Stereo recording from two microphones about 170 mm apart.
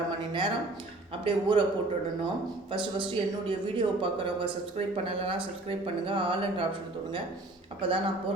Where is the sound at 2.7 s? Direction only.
30° right (ahead or behind).